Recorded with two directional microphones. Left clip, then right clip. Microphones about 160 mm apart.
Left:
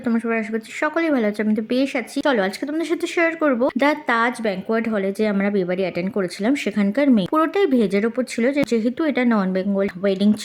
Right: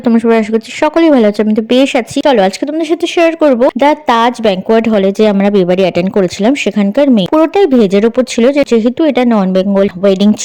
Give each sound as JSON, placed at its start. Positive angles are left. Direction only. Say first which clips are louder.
{"t": 0.0, "sound": "speech", "louder": "right 13 dB", "side_deg": -45}
{"t": 2.2, "sound": "speech", "louder": "right 10 dB", "side_deg": -30}